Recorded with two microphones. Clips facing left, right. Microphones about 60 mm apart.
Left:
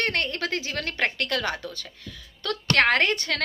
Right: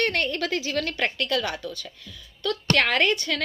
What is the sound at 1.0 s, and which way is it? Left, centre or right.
A woman's voice, left.